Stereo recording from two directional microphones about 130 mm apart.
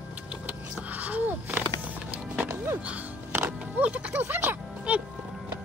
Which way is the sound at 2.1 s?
10° right (ahead or behind).